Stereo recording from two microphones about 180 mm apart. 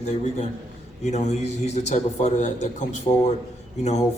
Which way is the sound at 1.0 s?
40° left (ahead or behind).